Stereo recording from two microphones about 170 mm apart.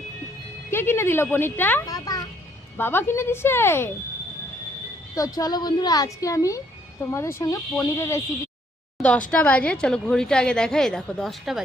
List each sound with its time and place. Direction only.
0.7 s speech: 15° left (ahead or behind)
1.9 s a sound: 20° left (ahead or behind)
2.7 s speech: 15° left (ahead or behind)
5.1 s a woman's voice: 20° left (ahead or behind)
9.0 s a sound: 5° left (ahead or behind)
9.3 s a woman's voice: 10° left (ahead or behind)